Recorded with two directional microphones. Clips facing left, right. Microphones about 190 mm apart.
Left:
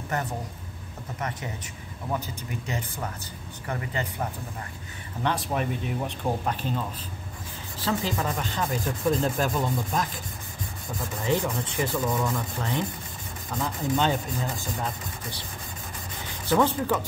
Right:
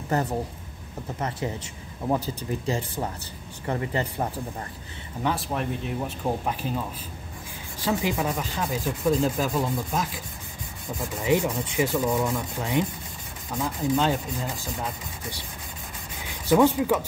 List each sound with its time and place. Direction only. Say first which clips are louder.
1.4 s speech: right 6 dB; 30° right (ahead or behind)
5.2 s speech: even; centre (ahead or behind)
7.8 s speech: right 2 dB; 10° right (ahead or behind)
16.4 s speech: right 4 dB; 10° right (ahead or behind)